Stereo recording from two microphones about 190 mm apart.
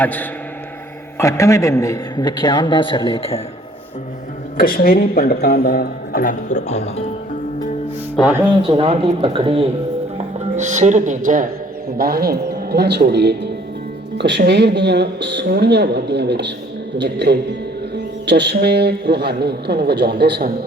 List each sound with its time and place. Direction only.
0.0 s a man's voice: 10° left (ahead or behind); by 3.4 s 30° left (ahead or behind)
4.5 s a man's voice: 50° left (ahead or behind)
8.1 s speech: 5° right (ahead or behind)
8.6 s speech: 30° right (ahead or behind)
10.6 s speech: 40° right (ahead or behind)
11.9 s speech: 55° right (ahead or behind)